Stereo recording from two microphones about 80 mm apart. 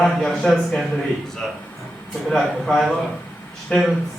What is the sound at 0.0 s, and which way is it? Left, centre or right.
Speech, centre.